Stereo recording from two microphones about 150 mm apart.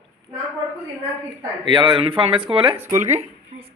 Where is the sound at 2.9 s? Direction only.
50° right (ahead or behind).